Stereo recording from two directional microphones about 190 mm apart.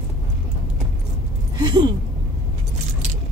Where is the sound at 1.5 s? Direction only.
25° right (ahead or behind).